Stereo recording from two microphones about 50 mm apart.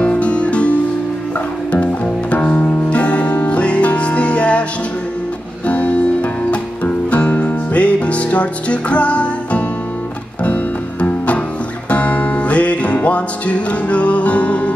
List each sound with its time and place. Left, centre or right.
0.0 s music: left
2.3 s music: left
5.7 s music: left